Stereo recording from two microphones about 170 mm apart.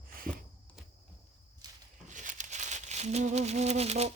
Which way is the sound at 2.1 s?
50° right (ahead or behind).